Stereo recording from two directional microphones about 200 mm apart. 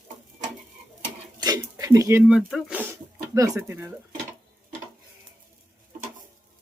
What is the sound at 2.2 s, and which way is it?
Speech, 5° right (ahead or behind).